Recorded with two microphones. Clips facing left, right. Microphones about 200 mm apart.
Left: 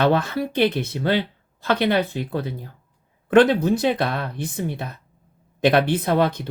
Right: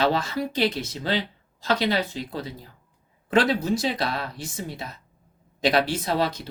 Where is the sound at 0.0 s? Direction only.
55° left (ahead or behind).